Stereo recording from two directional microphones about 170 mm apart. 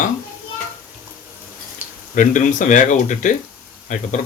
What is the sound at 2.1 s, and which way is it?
Speech, 50° left (ahead or behind).